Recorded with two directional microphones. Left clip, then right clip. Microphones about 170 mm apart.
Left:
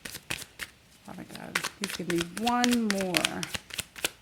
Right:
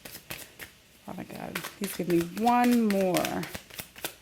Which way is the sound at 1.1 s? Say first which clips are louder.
Right 4 dB; 30° right (ahead or behind).